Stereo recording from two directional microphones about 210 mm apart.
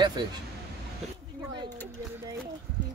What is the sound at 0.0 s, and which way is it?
Speech, 20° right (ahead or behind).